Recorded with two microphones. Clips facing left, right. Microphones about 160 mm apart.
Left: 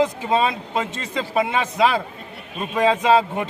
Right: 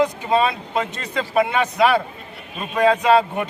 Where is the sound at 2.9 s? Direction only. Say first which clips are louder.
Right 1 dB; 25° left (ahead or behind).